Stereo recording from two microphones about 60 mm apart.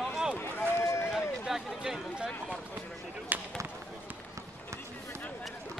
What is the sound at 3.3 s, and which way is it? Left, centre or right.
Basketball bounce, right.